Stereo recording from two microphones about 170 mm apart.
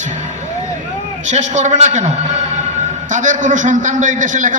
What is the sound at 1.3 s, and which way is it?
A man's voice, 45° right (ahead or behind).